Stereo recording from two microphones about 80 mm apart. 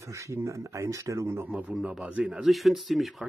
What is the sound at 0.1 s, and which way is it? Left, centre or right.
A man's voice, right.